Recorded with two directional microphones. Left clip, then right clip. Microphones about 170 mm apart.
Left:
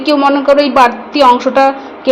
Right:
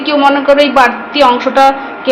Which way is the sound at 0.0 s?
65° left (ahead or behind).